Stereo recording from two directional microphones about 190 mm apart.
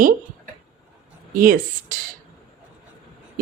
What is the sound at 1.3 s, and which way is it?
Speech, 45° right (ahead or behind).